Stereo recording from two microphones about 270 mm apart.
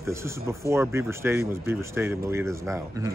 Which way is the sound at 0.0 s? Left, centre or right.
Centre.